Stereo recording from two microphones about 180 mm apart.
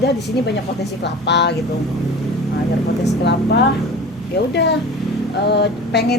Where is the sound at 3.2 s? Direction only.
70° left (ahead or behind).